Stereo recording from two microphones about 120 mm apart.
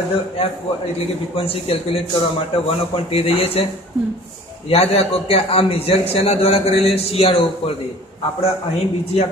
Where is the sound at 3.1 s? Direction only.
55° left (ahead or behind).